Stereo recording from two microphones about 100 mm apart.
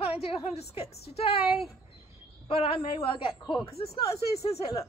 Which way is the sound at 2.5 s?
65° left (ahead or behind).